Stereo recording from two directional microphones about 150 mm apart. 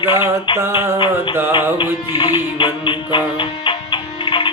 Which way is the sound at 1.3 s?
15° right (ahead or behind).